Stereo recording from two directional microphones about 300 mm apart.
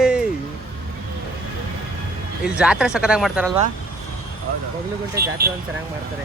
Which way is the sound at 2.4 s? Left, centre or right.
Centre.